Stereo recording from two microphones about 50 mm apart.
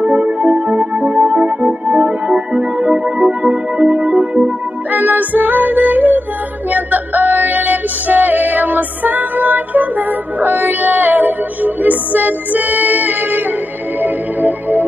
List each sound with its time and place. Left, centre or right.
0.0 s music: right